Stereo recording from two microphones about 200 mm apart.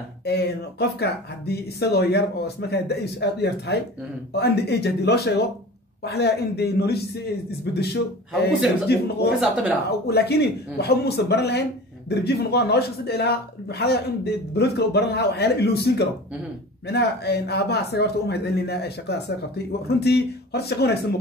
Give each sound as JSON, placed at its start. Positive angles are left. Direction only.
{"t": 0.2, "sound": "speech", "side_deg": 55}
{"t": 9.4, "sound": "speech", "side_deg": -5}
{"t": 9.8, "sound": "speech", "side_deg": 55}